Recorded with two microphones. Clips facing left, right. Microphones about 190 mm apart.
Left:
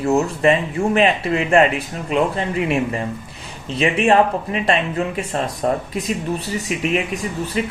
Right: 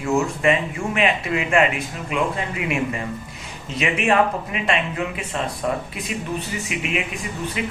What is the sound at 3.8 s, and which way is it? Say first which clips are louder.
Speech: left 4 dB; 35° left (ahead or behind).